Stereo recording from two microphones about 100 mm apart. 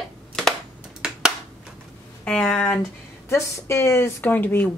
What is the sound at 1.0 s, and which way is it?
Finger snapping, 10° right (ahead or behind).